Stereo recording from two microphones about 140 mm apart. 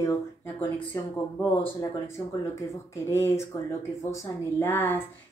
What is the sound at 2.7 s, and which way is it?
Speech, 20° left (ahead or behind).